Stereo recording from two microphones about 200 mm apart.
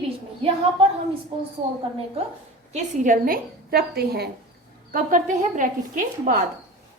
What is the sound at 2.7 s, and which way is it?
A woman's voice, 40° right (ahead or behind).